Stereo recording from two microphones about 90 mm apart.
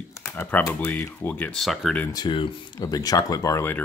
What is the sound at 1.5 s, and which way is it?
Speech, centre (ahead or behind).